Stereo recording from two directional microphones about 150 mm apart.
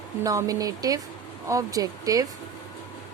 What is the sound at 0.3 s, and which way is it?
Speech, 25° right (ahead or behind).